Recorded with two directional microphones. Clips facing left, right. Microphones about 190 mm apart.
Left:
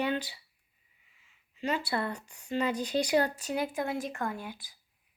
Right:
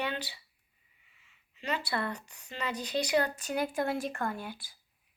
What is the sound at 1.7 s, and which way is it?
Speech, 15° left (ahead or behind).